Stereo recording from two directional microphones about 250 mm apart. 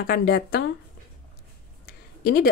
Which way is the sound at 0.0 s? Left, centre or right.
Left.